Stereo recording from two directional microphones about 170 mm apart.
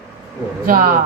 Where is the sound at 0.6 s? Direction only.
50° right (ahead or behind).